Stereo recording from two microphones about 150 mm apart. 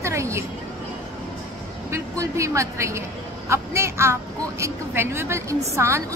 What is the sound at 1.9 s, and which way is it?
A woman's voice, 20° right (ahead or behind).